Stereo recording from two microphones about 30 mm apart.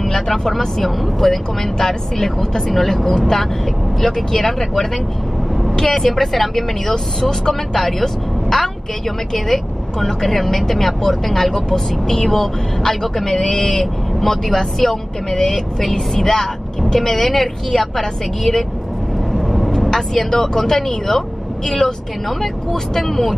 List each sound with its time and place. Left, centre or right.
0.1 s speech: centre
1.8 s speech: centre
5.9 s speech: centre
6.9 s speech: centre
11.5 s speech: centre
19.3 s vehicle: centre
19.9 s speech: centre